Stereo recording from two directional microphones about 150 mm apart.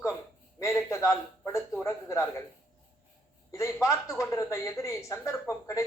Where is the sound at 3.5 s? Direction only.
20° left (ahead or behind).